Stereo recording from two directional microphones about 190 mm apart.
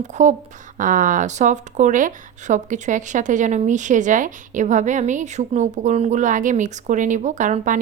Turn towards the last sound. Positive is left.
turn(degrees=-40)  # may be behind; listen again after turning